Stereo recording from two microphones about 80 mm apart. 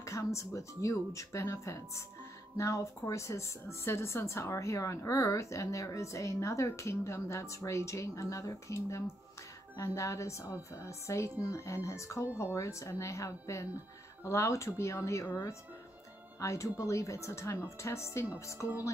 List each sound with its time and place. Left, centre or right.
0.0 s a woman's voice: left
16.3 s a woman's voice: left